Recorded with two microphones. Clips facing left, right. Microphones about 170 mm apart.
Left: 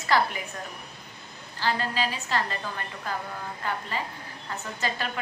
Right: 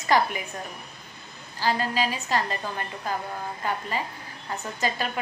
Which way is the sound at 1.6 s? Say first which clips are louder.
Right 2 dB; 15° right (ahead or behind).